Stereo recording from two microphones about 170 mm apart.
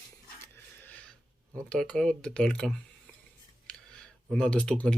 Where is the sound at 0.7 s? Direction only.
10° left (ahead or behind).